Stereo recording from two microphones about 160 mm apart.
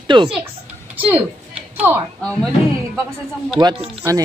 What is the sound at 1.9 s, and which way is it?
Speech, 15° right (ahead or behind).